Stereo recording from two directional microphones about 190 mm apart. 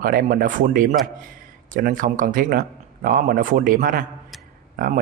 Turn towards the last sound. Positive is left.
turn(degrees=-45)  # may be behind; listen again after turning